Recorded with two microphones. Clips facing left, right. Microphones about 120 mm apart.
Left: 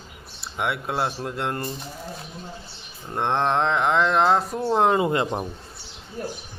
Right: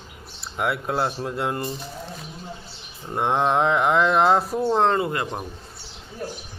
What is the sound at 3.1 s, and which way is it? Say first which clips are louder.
Speech: right 1 dB; 10° right (ahead or behind).